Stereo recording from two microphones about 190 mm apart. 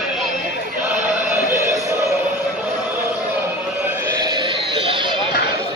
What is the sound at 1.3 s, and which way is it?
Music, 10° right (ahead or behind).